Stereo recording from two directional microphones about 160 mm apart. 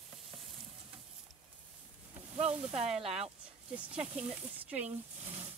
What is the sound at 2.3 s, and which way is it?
Sizzle, 40° right (ahead or behind).